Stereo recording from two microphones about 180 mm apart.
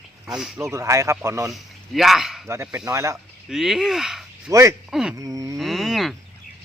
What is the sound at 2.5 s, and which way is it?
Speech, 15° right (ahead or behind).